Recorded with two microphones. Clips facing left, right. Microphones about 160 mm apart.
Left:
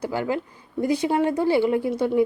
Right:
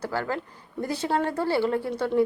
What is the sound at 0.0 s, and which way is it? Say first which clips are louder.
A woman's voice: left 4 dB; 15° left (ahead or behind).